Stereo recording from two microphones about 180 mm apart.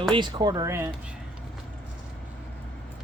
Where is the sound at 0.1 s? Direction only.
25° right (ahead or behind).